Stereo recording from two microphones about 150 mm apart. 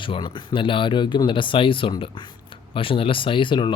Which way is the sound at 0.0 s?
30° left (ahead or behind).